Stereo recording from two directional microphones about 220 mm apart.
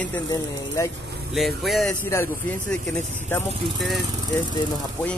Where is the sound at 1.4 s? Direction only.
Centre (ahead or behind).